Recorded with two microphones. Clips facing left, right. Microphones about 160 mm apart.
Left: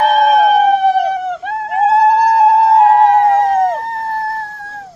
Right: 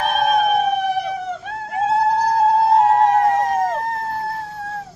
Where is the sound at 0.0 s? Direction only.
90° left.